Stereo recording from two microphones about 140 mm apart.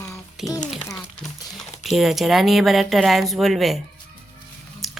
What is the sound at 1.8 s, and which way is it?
Speech, centre (ahead or behind).